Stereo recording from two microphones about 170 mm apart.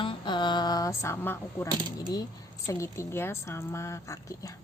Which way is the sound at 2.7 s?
15° left (ahead or behind).